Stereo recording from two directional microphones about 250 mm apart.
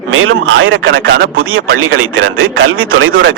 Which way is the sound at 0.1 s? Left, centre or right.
Right.